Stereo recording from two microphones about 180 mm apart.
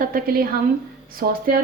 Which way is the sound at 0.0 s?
50° right (ahead or behind).